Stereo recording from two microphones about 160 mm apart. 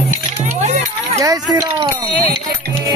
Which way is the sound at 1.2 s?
20° right (ahead or behind).